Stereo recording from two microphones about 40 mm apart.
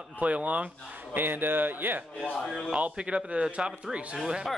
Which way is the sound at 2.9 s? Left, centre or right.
Right.